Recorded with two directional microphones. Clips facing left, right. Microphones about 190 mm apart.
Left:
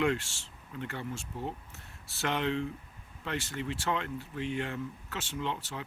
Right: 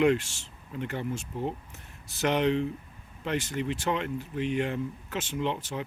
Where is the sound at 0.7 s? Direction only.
20° right (ahead or behind).